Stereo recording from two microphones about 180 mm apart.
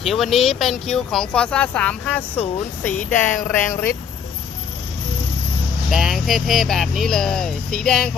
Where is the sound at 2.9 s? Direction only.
45° left (ahead or behind).